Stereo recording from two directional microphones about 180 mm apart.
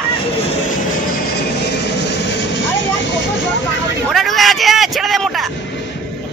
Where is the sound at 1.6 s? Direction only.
70° left (ahead or behind).